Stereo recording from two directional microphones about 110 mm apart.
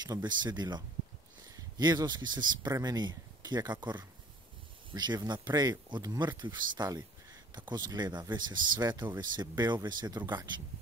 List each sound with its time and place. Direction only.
0.0 s speech: 40° right (ahead or behind)